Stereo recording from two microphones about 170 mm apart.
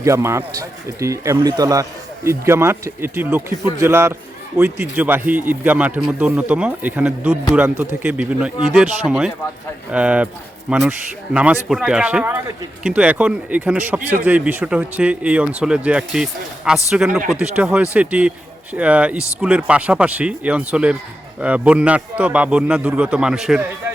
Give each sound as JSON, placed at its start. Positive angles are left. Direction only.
{"t": 0.0, "sound": "speech", "side_deg": -15}